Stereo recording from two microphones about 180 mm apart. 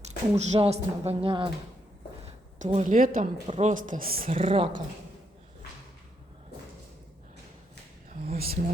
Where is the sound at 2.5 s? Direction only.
40° right (ahead or behind).